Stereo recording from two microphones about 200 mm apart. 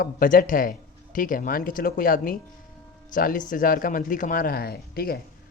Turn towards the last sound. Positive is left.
turn(degrees=50)  # may be behind; listen again after turning